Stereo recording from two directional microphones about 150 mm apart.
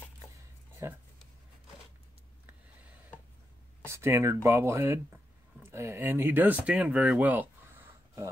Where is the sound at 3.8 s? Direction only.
15° right (ahead or behind).